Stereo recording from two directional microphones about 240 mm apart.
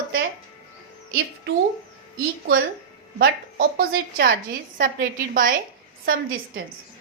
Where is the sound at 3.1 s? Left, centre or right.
Right.